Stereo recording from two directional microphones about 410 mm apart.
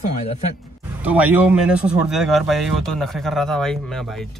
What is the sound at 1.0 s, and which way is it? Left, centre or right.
Speech, centre.